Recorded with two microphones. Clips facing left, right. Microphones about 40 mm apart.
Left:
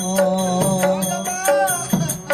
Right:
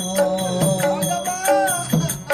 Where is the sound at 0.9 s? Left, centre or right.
Centre.